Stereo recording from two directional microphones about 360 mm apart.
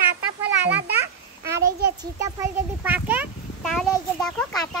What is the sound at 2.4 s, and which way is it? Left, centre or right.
A child's voice, centre.